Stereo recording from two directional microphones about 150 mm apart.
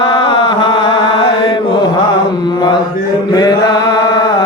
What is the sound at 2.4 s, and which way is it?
Mantra, 30° left (ahead or behind).